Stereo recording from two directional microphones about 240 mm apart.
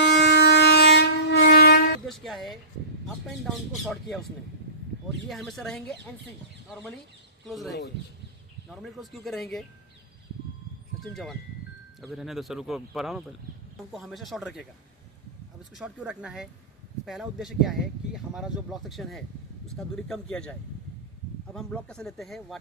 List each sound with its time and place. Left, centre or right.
0.0 s train: left
2.0 s music: centre
3.2 s speech: centre
5.3 s speech: centre
7.4 s speech: centre
8.7 s speech: centre
11.0 s speech: centre
15.7 s speech: centre